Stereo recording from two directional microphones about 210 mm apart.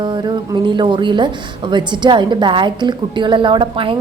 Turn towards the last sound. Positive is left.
turn(degrees=-25)  # may be behind; listen again after turning